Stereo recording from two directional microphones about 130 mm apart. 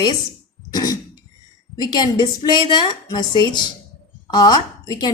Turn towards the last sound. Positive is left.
turn(degrees=30)  # may be behind; listen again after turning